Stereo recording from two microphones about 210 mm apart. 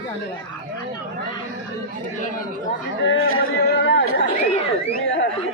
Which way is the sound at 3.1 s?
75° left (ahead or behind).